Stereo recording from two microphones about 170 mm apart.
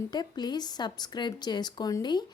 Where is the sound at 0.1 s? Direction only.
25° left (ahead or behind).